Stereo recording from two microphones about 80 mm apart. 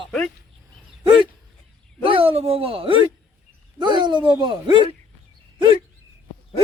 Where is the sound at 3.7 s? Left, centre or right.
Right.